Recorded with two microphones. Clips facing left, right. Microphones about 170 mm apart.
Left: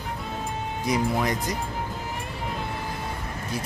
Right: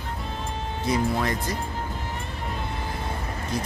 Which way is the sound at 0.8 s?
15° left (ahead or behind).